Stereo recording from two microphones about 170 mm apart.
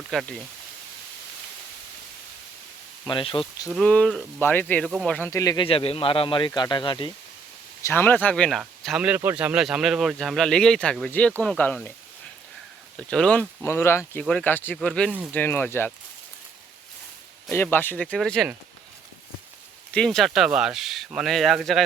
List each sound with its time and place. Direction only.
0.1 s speech: centre (ahead or behind)
3.1 s speech: 30° left (ahead or behind)
3.7 s speech: 5° left (ahead or behind); by 5.6 s 20° left (ahead or behind)
5.6 s speech: 35° left (ahead or behind)
7.8 s speech: 15° left (ahead or behind)
13.0 s speech: 5° left (ahead or behind)
17.5 s speech: 15° left (ahead or behind)
19.9 s speech: 5° left (ahead or behind)